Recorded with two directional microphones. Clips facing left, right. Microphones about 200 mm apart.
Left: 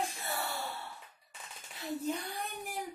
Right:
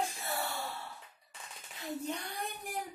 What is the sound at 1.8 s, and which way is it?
Speech, centre (ahead or behind).